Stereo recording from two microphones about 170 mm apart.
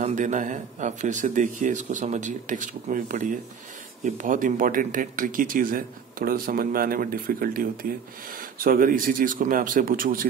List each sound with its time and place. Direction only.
0.0 s speech: 45° right (ahead or behind)